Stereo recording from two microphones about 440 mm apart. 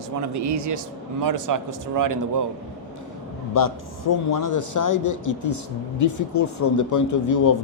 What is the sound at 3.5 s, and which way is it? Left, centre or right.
A man's voice, left.